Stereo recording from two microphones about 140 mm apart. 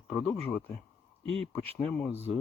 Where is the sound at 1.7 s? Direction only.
10° left (ahead or behind).